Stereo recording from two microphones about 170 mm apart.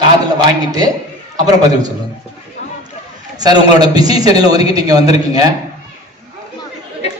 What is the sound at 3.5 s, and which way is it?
A man's voice, 25° right (ahead or behind).